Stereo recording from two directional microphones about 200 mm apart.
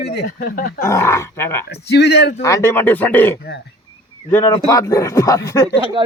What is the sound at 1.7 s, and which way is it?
Speech, 55° left (ahead or behind).